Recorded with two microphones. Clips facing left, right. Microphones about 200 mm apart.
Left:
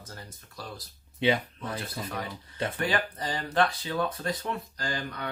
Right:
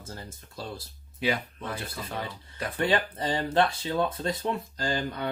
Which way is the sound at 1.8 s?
25° right (ahead or behind).